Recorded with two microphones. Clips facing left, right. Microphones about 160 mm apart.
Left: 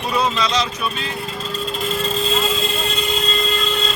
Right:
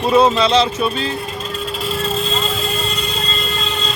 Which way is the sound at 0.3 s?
30° right (ahead or behind).